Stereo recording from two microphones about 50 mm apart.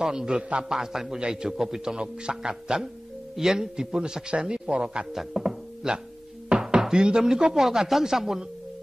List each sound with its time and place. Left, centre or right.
0.0 s speech: centre
5.1 s music: centre
6.5 s a sound: centre
6.8 s speech: centre